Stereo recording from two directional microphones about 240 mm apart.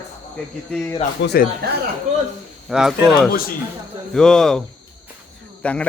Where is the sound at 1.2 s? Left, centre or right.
Left.